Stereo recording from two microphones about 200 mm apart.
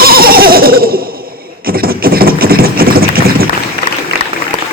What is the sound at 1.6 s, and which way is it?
Engine, 50° right (ahead or behind).